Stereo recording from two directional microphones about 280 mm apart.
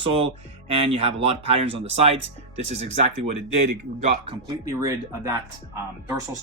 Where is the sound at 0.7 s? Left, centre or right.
Centre.